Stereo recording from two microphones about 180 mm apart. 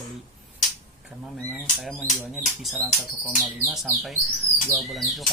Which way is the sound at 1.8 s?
Centre (ahead or behind).